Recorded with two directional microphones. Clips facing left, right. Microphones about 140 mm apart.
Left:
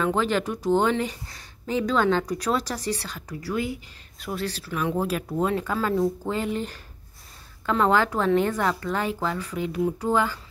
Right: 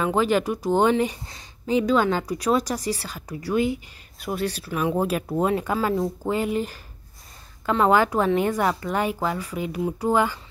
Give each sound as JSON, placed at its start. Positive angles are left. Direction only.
{"t": 0.0, "sound": "speech", "side_deg": -10}
{"t": 3.4, "sound": "speech", "side_deg": -20}